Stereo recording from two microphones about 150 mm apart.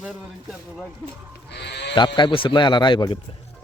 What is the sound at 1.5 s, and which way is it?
Speech, 90° left.